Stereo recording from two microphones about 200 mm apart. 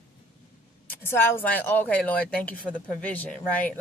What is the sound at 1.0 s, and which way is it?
A woman's voice, 10° left (ahead or behind).